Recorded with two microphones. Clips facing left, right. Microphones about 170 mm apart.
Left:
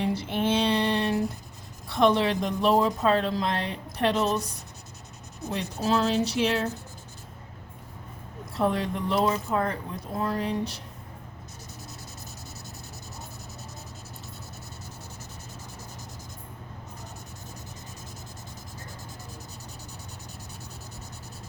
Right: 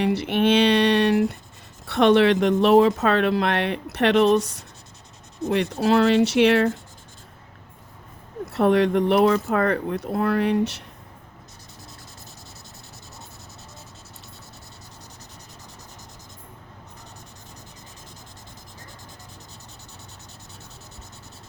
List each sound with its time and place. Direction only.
0.0 s a sound: 70° right (ahead or behind)
1.9 s a woman's voice: 75° right (ahead or behind)
5.5 s a woman's voice: 70° right (ahead or behind)
8.5 s a woman's voice: 70° right (ahead or behind)